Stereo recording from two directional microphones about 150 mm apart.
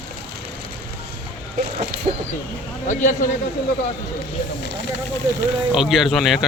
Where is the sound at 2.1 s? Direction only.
50° right (ahead or behind).